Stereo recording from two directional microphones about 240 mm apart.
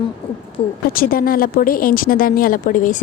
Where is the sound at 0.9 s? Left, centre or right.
Left.